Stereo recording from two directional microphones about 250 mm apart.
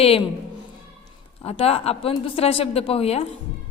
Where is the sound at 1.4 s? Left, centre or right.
Left.